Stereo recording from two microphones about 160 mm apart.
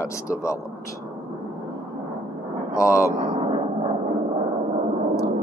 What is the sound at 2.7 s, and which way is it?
Speech, 20° left (ahead or behind).